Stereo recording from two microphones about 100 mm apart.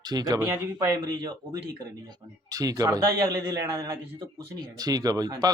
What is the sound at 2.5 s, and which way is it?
A man's voice, 40° right (ahead or behind).